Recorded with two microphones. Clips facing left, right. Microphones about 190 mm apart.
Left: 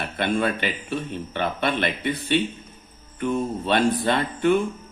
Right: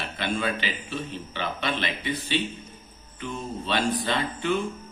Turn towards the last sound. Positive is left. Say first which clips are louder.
# left 6 dB
turn(degrees=55)  # may be behind; listen again after turning